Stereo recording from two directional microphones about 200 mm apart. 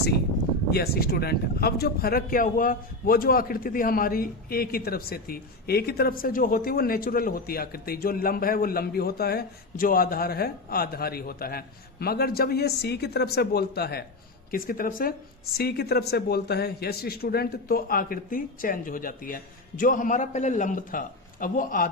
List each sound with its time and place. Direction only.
0.7 s speech: 50° left (ahead or behind)